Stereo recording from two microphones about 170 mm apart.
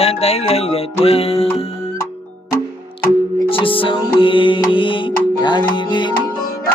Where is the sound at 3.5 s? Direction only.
30° left (ahead or behind).